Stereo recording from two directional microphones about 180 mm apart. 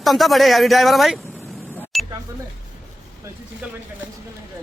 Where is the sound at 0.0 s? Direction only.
Centre (ahead or behind).